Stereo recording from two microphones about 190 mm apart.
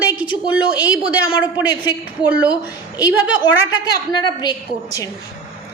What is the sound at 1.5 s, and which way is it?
Speech, 20° left (ahead or behind).